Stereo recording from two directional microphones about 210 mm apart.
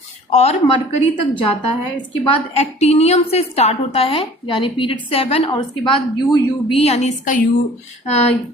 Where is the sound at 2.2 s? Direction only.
30° left (ahead or behind).